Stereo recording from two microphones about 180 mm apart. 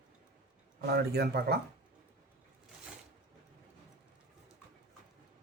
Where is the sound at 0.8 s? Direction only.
60° right (ahead or behind).